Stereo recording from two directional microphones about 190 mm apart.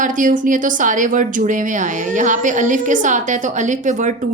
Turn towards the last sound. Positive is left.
turn(degrees=-40)  # may be behind; listen again after turning